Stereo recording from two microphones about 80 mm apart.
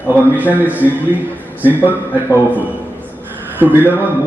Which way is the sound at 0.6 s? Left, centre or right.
Right.